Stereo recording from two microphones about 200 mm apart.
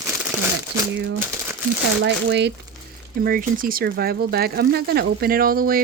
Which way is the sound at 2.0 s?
60° right (ahead or behind).